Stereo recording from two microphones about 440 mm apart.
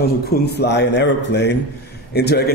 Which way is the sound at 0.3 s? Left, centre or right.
Left.